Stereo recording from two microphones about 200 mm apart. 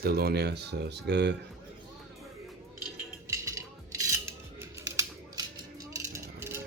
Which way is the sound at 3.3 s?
15° right (ahead or behind).